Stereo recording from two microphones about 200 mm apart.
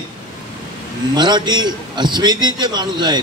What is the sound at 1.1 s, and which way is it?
A man's voice, 20° right (ahead or behind).